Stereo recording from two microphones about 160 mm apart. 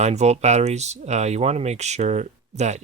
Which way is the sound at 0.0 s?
45° right (ahead or behind).